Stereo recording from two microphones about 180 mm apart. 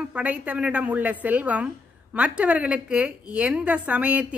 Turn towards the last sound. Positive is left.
turn(degrees=-5)  # may be behind; listen again after turning